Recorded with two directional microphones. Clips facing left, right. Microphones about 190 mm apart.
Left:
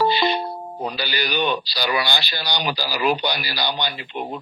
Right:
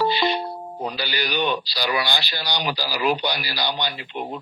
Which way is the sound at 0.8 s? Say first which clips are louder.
Left 1 dB; 65° left (ahead or behind).